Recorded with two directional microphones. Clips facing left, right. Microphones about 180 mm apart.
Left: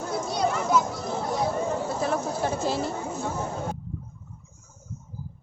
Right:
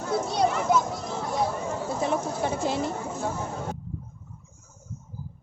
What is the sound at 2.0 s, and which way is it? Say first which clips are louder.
Speech: even; 20° right (ahead or behind).